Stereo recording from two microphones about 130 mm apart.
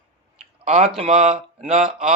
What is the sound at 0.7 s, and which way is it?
Speech, 55° right (ahead or behind).